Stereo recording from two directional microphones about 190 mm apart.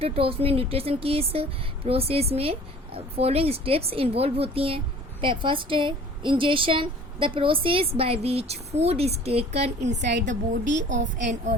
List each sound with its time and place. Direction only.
0.0 s a woman's voice: 30° right (ahead or behind)
10.0 s a woman's voice: 65° right (ahead or behind)
11.2 s speech: 40° right (ahead or behind)